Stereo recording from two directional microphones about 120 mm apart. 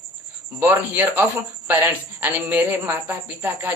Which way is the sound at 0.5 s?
15° right (ahead or behind).